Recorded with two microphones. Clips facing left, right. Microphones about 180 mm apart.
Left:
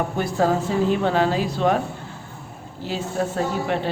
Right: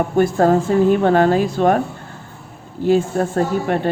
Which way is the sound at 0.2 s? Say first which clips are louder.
Right 8 dB; 50° right (ahead or behind).